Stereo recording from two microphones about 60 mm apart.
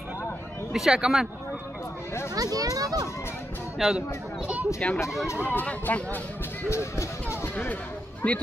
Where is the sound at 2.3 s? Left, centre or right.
Right.